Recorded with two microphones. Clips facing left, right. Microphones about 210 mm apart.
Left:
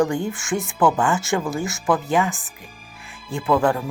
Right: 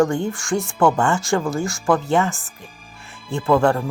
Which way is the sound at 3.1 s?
Centre (ahead or behind).